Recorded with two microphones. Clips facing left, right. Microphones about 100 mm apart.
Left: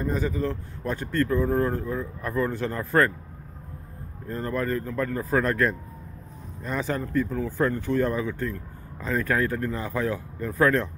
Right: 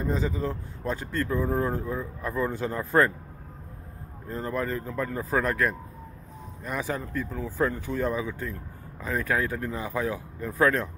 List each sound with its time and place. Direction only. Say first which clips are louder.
0.0 s speech: left 2 dB; 20° right (ahead or behind)
4.3 s speech: left 2 dB; 15° right (ahead or behind)